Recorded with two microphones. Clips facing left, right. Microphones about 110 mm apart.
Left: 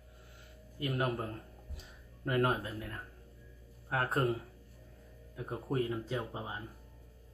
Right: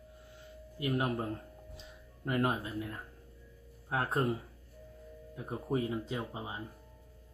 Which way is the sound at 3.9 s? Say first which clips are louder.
Even; 20° right (ahead or behind).